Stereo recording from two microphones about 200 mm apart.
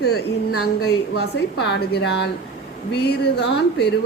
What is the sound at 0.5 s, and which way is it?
Speech, 90° left.